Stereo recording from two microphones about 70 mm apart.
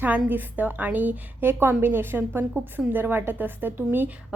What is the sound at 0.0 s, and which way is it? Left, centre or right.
A woman's voice, right.